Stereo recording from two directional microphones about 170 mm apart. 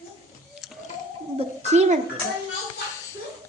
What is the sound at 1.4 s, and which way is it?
Speech, 40° right (ahead or behind).